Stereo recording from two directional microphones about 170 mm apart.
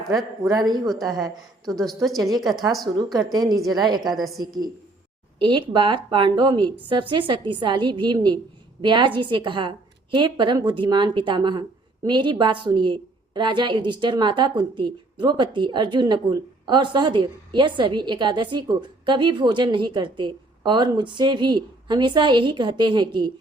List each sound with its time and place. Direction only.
0.4 s a woman's voice: 20° right (ahead or behind)
1.6 s a woman's voice: centre (ahead or behind)
2.8 s a woman's voice: 25° right (ahead or behind)
4.1 s a woman's voice: centre (ahead or behind)
4.4 s a woman's voice: 25° right (ahead or behind)